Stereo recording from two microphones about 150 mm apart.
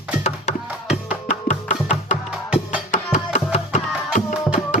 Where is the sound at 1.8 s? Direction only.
50° left (ahead or behind).